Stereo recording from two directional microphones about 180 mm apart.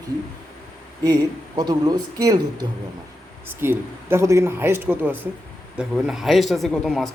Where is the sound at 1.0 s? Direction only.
20° right (ahead or behind).